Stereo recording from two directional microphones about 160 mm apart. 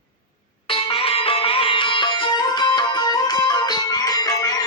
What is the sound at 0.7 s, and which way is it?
Sitar, 35° left (ahead or behind).